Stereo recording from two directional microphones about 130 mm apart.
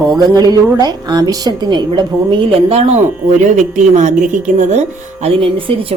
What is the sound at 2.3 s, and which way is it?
Speech, 45° right (ahead or behind).